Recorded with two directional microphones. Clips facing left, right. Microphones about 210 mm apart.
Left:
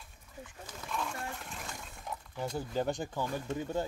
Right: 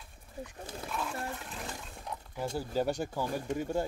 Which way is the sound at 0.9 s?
5° right (ahead or behind).